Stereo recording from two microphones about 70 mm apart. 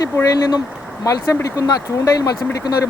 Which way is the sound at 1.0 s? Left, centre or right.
Left.